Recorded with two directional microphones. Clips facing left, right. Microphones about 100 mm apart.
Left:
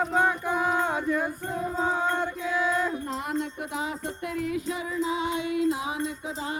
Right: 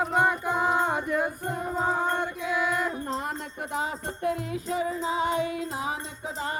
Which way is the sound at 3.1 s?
40° right (ahead or behind).